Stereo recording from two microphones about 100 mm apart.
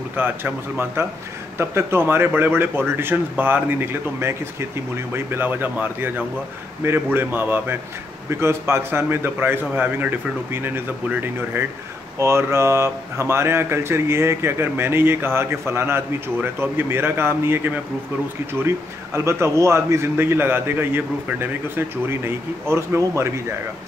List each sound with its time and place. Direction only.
0.1 s speech: 20° right (ahead or behind)
19.1 s speech: 30° right (ahead or behind)